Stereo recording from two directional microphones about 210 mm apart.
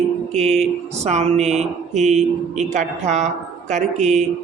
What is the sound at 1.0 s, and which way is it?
Speech, 30° right (ahead or behind).